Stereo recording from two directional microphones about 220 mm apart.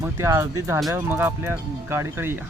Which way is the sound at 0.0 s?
10° right (ahead or behind).